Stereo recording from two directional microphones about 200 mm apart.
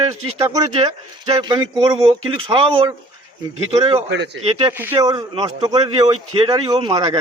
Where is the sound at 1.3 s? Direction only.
20° right (ahead or behind).